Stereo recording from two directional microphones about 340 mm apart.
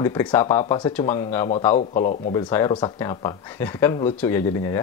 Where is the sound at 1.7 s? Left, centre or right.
Left.